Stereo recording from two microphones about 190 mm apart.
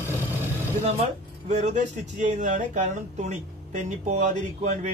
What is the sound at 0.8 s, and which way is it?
Speech, 35° right (ahead or behind).